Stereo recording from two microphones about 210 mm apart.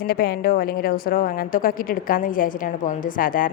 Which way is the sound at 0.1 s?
45° left (ahead or behind).